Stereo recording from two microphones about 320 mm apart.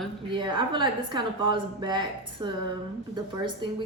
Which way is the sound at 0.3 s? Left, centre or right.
Centre.